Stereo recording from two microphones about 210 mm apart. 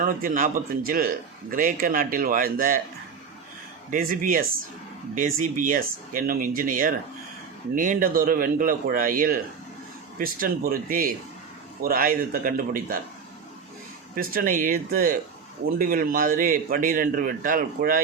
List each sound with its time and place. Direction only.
0.0 s speech: 40° right (ahead or behind)
3.9 s a man's voice: 40° right (ahead or behind)
14.2 s a man's voice: 40° right (ahead or behind)